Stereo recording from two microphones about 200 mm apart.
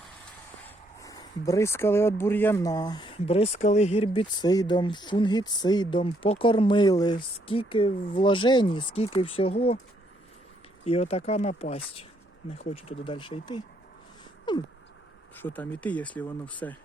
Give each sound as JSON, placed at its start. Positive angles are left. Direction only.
{"t": 0.9, "sound": "speech", "side_deg": 15}
{"t": 10.8, "sound": "speech", "side_deg": 30}
{"t": 15.4, "sound": "speech", "side_deg": 10}